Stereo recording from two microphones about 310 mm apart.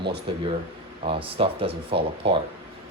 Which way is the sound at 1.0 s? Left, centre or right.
Centre.